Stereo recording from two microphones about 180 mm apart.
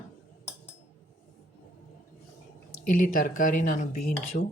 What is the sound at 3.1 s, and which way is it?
Speech, 50° left (ahead or behind).